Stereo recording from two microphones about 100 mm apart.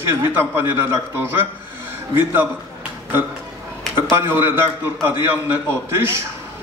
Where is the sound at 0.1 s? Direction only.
25° right (ahead or behind).